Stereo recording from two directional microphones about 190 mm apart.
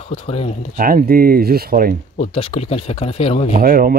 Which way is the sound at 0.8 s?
50° right (ahead or behind).